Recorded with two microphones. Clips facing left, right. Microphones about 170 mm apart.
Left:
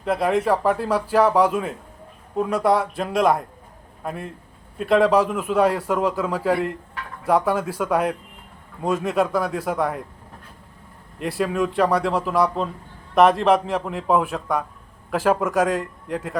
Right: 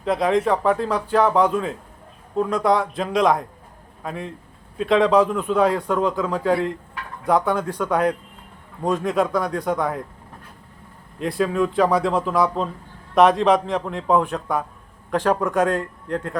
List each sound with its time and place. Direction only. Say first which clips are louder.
0.0 s a man's voice: right 1 dB; centre (ahead or behind)
11.2 s a man's voice: right 2 dB; 5° left (ahead or behind)